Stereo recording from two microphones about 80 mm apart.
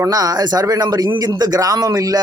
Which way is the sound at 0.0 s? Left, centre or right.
Right.